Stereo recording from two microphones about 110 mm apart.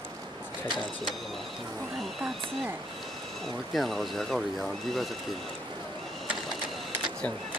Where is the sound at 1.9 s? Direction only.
Centre (ahead or behind).